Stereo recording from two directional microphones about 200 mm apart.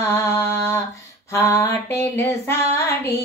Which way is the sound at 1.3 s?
15° left (ahead or behind).